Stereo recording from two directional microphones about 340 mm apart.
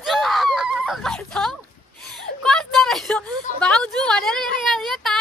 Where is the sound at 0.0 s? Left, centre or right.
Centre.